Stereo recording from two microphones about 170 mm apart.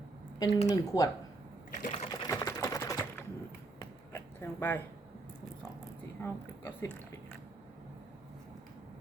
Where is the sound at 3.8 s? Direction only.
15° left (ahead or behind).